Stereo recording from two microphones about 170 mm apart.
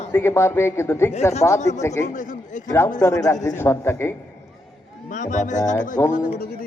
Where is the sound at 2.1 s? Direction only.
50° left (ahead or behind).